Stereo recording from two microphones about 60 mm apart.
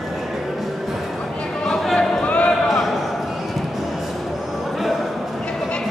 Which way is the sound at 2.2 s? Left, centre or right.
Left.